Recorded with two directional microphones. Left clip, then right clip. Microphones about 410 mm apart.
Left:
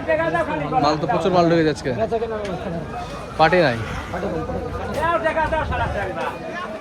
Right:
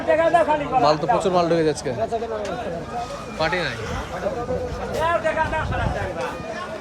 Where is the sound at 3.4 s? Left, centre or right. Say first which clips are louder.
Left 8 dB; centre.